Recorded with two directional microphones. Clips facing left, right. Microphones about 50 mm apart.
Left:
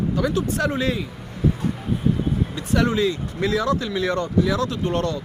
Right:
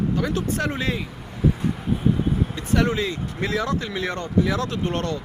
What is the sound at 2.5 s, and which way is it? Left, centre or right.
Speech, right.